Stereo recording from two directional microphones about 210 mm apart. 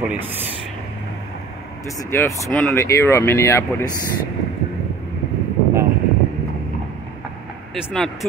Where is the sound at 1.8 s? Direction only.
15° left (ahead or behind).